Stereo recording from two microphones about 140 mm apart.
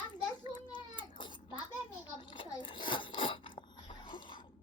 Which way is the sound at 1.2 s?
35° left (ahead or behind).